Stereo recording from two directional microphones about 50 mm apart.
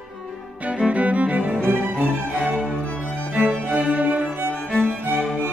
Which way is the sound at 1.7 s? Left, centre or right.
Right.